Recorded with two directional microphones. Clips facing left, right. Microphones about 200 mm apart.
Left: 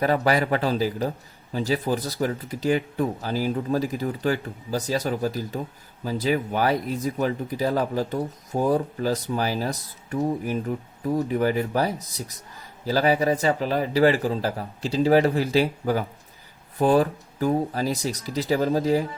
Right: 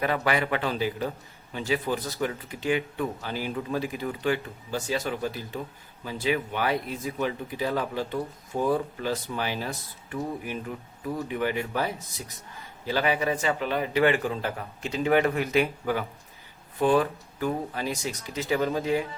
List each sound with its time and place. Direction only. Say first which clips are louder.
0.0 s speech: left 4 dB; 40° left (ahead or behind)